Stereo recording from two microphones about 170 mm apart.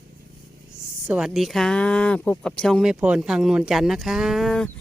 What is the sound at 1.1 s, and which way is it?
Speech, centre (ahead or behind).